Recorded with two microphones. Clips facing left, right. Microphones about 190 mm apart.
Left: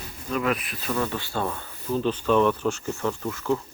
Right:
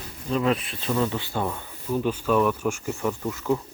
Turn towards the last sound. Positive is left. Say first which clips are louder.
# right 1 dB
turn(degrees=-20)  # may be behind; listen again after turning